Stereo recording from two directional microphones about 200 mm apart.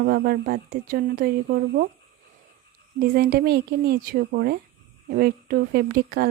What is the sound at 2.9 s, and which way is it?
A woman's voice, 50° right (ahead or behind).